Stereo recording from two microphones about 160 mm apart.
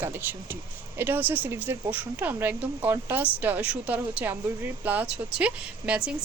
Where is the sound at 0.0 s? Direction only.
10° right (ahead or behind).